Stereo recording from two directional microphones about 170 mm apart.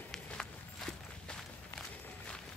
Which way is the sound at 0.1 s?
5° left (ahead or behind).